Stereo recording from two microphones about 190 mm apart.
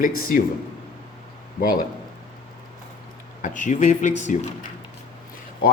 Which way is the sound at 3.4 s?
40° left (ahead or behind).